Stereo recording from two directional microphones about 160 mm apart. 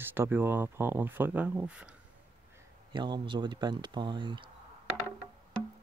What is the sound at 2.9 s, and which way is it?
Speech, 30° right (ahead or behind).